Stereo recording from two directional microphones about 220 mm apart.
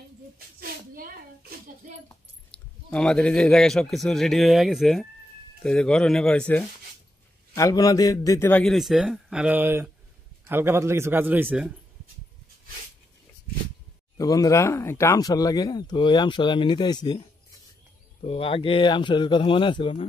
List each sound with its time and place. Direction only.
0.6 s a sound: 40° right (ahead or behind)
2.9 s a man's voice: 5° left (ahead or behind)
7.5 s a man's voice: 15° left (ahead or behind); by 11.7 s 5° right (ahead or behind)
14.1 s speech: 15° left (ahead or behind)
18.2 s speech: 25° left (ahead or behind)